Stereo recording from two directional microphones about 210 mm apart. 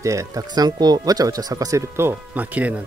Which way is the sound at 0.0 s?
15° right (ahead or behind).